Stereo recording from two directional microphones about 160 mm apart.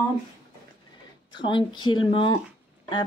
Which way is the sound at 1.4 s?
30° left (ahead or behind).